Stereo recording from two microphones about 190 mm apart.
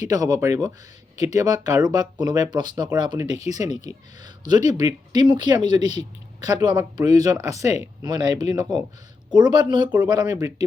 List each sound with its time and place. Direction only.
0.0 s speech: 20° right (ahead or behind)
3.3 s speech: 35° left (ahead or behind)
3.8 s speech: 20° right (ahead or behind)